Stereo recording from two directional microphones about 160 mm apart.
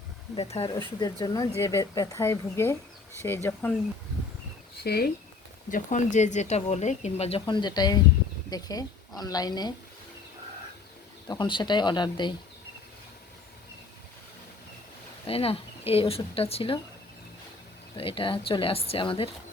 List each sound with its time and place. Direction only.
0.3 s speech: 35° left (ahead or behind)
0.9 s speech: 25° left (ahead or behind)
4.8 s speech: 85° left
5.7 s speech: 50° left (ahead or behind); by 9.7 s 25° left (ahead or behind)
11.3 s speech: 30° left (ahead or behind)
15.3 s speech: 35° left (ahead or behind)
17.9 s speech: 35° left (ahead or behind)